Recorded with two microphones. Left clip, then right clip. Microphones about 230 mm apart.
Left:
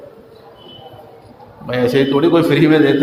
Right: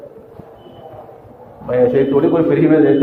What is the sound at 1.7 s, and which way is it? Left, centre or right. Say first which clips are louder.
A man's voice: right 2 dB; left.